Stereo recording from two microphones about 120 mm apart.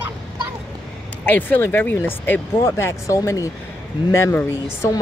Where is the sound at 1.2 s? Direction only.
15° left (ahead or behind).